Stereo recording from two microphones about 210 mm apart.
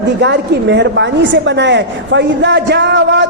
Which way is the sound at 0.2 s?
55° right (ahead or behind).